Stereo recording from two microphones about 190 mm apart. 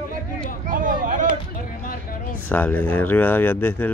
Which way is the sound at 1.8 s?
50° left (ahead or behind).